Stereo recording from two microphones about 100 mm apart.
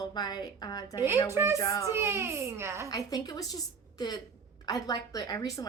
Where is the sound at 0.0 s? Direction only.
45° left (ahead or behind).